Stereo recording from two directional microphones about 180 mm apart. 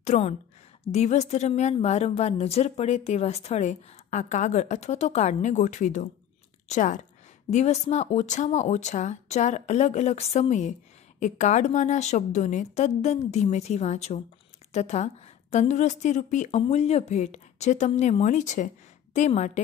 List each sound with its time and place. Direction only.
0.0 s a woman's voice: 40° left (ahead or behind)